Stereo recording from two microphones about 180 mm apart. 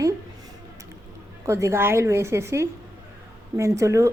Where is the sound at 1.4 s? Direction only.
15° right (ahead or behind).